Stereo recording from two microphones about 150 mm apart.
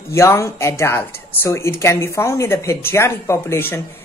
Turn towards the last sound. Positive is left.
turn(degrees=15)  # may be behind; listen again after turning